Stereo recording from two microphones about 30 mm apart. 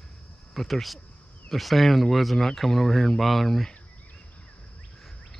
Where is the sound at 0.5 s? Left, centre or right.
Centre.